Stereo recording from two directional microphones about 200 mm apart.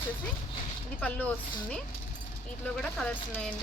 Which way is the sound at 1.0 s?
5° left (ahead or behind).